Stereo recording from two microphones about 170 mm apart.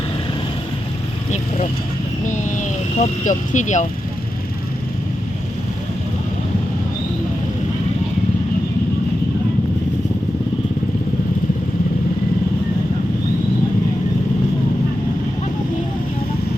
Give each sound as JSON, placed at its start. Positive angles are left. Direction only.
{"t": 2.2, "sound": "speech", "side_deg": 50}